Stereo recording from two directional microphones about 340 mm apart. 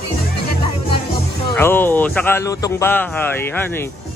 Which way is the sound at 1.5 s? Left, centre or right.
Centre.